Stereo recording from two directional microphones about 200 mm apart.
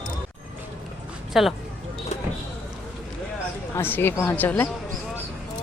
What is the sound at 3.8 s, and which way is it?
Speech, 10° left (ahead or behind).